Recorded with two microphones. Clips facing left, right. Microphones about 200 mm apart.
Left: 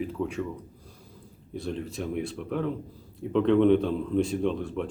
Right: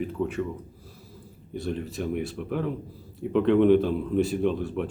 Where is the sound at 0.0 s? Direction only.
Centre (ahead or behind).